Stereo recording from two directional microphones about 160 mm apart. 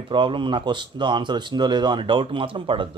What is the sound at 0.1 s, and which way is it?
Speech, 30° right (ahead or behind).